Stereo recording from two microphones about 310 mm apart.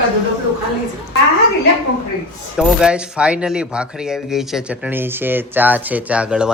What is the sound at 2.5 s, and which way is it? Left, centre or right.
Speech, centre.